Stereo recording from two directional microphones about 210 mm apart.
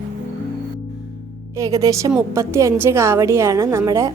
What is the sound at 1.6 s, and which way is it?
A woman's voice, 15° right (ahead or behind).